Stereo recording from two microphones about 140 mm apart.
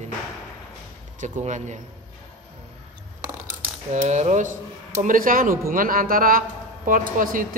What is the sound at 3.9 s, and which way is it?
Speech, 55° right (ahead or behind).